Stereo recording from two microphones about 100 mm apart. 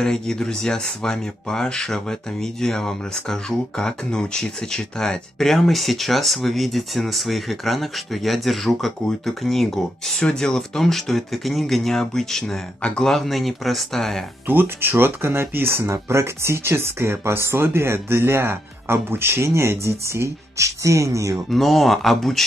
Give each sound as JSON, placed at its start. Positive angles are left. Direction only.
{"t": 0.0, "sound": "speech", "side_deg": 5}
{"t": 14.5, "sound": "speech", "side_deg": -20}
{"t": 21.5, "sound": "speech", "side_deg": 0}